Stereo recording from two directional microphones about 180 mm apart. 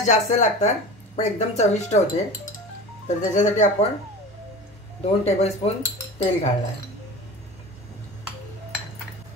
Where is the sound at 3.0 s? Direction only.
40° left (ahead or behind).